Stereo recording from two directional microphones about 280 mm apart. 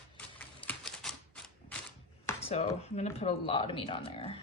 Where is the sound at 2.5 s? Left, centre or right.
Left.